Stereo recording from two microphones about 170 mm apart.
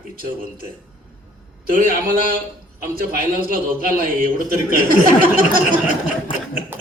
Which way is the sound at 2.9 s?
55° right (ahead or behind).